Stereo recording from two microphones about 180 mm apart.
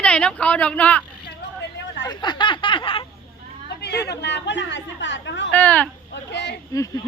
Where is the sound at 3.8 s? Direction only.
70° left (ahead or behind).